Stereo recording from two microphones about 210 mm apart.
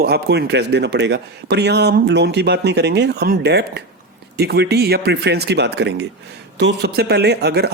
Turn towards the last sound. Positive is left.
turn(degrees=-50)  # may be behind; listen again after turning